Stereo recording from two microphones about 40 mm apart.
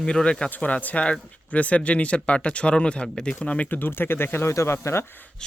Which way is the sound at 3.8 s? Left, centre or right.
Left.